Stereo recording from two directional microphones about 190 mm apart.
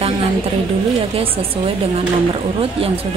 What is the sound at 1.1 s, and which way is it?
Speech, 30° right (ahead or behind).